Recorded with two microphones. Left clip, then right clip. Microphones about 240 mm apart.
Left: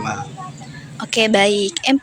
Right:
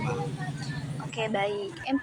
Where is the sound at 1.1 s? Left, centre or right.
Left.